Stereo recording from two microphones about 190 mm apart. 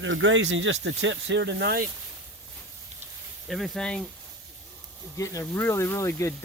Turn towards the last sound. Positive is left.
turn(degrees=15)  # may be behind; listen again after turning